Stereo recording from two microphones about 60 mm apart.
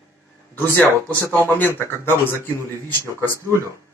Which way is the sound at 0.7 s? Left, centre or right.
Left.